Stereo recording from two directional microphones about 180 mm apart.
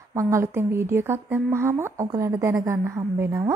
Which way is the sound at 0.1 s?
15° right (ahead or behind).